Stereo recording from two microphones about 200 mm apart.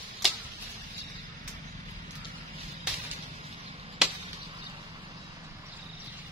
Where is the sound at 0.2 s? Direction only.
Centre (ahead or behind).